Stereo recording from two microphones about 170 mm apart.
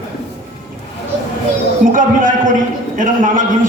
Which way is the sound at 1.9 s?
50° right (ahead or behind).